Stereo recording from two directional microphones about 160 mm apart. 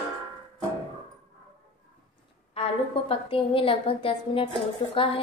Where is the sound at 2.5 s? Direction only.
35° left (ahead or behind).